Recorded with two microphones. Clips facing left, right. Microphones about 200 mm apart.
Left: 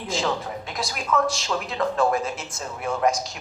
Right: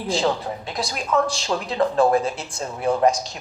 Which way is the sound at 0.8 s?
30° right (ahead or behind).